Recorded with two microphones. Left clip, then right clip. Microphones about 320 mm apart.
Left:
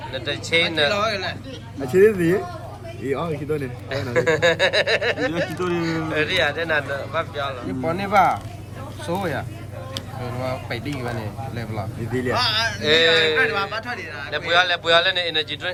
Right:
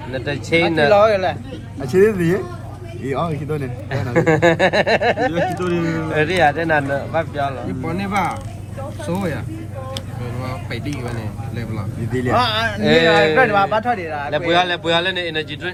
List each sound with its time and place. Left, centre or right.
0.1 s a man's voice: centre
7.9 s speech: left
10.7 s speech: left
12.1 s a man's voice: centre